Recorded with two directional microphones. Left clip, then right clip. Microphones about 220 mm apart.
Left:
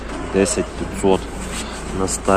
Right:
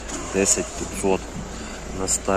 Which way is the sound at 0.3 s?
5° right (ahead or behind).